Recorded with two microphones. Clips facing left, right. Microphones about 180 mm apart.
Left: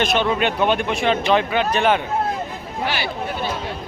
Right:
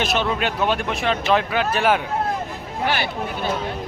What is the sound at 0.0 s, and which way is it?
Speech, 5° right (ahead or behind).